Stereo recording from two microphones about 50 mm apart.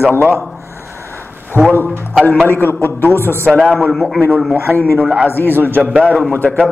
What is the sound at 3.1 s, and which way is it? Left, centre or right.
Speech, right.